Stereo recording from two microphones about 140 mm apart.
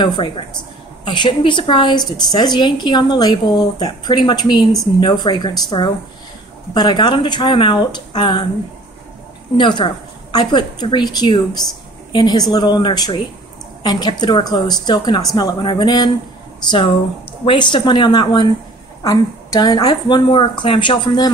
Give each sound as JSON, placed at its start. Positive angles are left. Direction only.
{"t": 0.0, "sound": "a woman's voice", "side_deg": 35}
{"t": 9.6, "sound": "a woman's voice", "side_deg": 35}
{"t": 17.5, "sound": "a woman's voice", "side_deg": 35}